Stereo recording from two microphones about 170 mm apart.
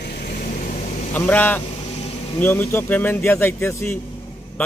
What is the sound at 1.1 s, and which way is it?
Speech, 10° left (ahead or behind).